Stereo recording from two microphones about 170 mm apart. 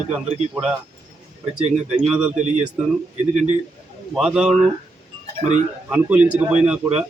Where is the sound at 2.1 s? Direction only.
5° right (ahead or behind).